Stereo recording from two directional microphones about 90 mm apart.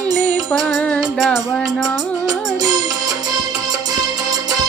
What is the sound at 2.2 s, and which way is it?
Music, 45° right (ahead or behind).